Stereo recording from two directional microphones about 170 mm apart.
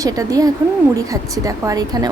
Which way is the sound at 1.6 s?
20° right (ahead or behind).